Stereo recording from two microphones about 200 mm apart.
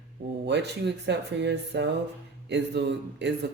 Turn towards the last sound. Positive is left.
turn(degrees=-60)  # may be behind; listen again after turning